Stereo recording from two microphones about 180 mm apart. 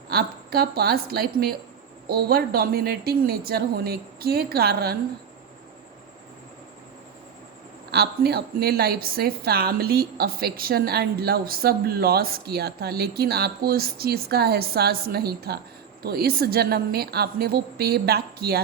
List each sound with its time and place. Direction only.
0.1 s a woman's voice: 60° right (ahead or behind)
7.9 s a woman's voice: 60° right (ahead or behind)